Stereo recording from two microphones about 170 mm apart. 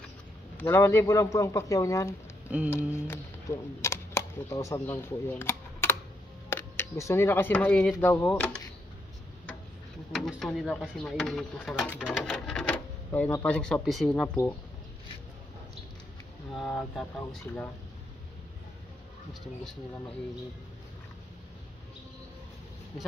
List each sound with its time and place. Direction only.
0.6 s a man's voice: 15° left (ahead or behind)
2.5 s speech: 5° right (ahead or behind)
2.9 s a man's voice: 15° left (ahead or behind)
10.1 s a man's voice: centre (ahead or behind)
16.5 s a man's voice: centre (ahead or behind)